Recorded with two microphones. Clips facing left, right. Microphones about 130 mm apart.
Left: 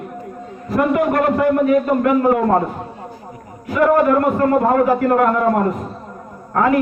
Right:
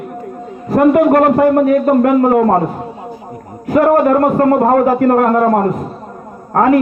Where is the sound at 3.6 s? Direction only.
40° right (ahead or behind).